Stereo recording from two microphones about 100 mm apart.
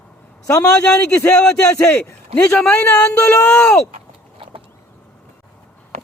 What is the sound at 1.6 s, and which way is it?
A man's voice, 30° left (ahead or behind).